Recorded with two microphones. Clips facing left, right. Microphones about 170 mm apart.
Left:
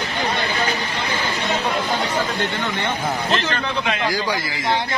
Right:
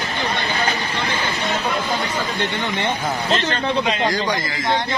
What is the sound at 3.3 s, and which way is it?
Speech, 25° right (ahead or behind).